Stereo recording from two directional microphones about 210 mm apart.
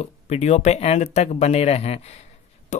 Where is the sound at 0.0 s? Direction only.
30° left (ahead or behind).